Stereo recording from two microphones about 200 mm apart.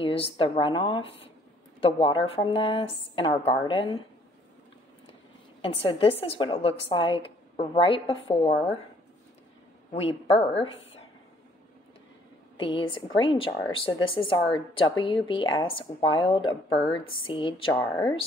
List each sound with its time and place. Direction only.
0.0 s a woman's voice: 25° left (ahead or behind)
5.6 s a woman's voice: 30° left (ahead or behind)
9.9 s a woman's voice: 30° left (ahead or behind)
12.5 s a woman's voice: 25° left (ahead or behind)